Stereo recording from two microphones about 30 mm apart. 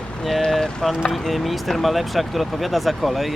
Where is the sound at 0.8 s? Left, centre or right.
Centre.